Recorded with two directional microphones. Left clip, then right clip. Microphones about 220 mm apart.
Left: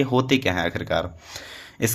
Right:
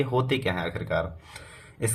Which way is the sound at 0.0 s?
30° left (ahead or behind).